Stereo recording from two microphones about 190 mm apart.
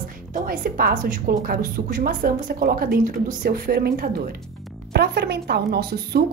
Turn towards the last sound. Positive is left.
turn(degrees=-55)  # may be behind; listen again after turning